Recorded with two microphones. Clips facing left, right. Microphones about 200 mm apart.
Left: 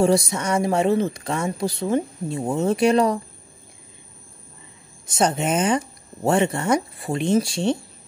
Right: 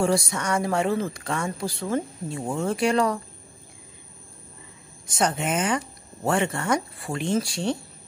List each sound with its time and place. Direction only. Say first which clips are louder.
0.0 s speech: left 5 dB; 20° left (ahead or behind)
5.0 s speech: left 4 dB; 25° left (ahead or behind)